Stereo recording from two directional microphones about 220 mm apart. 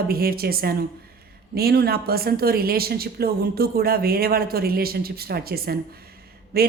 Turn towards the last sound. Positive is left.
turn(degrees=-45)  # may be behind; listen again after turning